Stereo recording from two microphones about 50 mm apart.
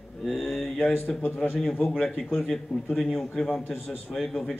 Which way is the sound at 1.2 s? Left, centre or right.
Left.